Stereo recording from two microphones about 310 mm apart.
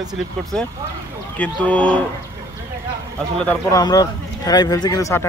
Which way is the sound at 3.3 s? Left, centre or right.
Centre.